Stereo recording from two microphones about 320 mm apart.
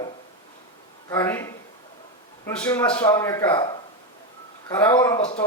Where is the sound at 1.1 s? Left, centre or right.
Centre.